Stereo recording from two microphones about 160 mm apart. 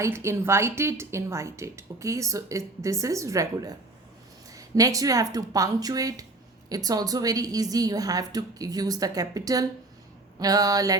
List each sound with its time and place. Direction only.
0.0 s speech: 15° right (ahead or behind)